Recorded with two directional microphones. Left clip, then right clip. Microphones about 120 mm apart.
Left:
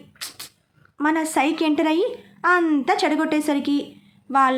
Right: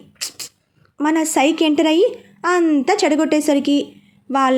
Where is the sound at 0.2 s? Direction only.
25° right (ahead or behind).